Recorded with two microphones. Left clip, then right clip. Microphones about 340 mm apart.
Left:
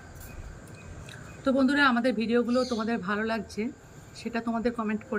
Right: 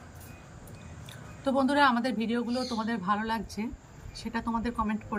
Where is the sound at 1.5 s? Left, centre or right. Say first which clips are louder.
Left 1 dB; right.